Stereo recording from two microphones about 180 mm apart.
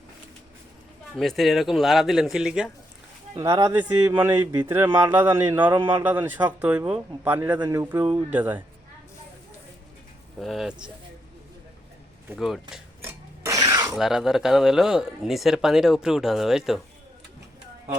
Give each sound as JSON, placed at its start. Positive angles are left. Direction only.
{"t": 1.1, "sound": "speech", "side_deg": 0}
{"t": 3.3, "sound": "speech", "side_deg": -20}
{"t": 10.4, "sound": "speech", "side_deg": 0}
{"t": 12.3, "sound": "speech", "side_deg": 0}
{"t": 13.4, "sound": "a sound", "side_deg": -20}
{"t": 13.9, "sound": "speech", "side_deg": 0}